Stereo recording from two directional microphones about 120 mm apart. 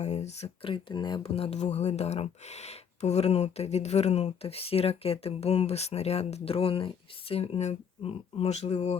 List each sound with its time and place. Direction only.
0.0 s speech: 70° left (ahead or behind); by 1.2 s 40° left (ahead or behind)
1.2 s speech: 55° left (ahead or behind)